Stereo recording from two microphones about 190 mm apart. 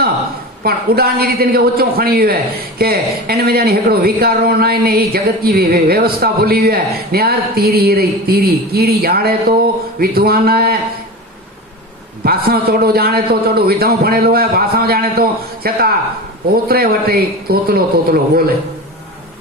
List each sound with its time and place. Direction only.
0.6 s a woman's voice: 55° right (ahead or behind)
12.2 s a woman's voice: 55° right (ahead or behind)